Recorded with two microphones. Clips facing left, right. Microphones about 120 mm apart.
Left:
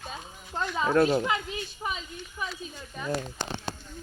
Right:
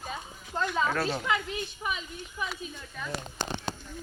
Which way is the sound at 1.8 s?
20° left (ahead or behind).